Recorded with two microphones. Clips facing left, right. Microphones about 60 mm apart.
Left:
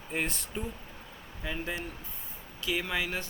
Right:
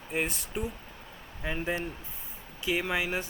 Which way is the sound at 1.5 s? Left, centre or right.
Centre.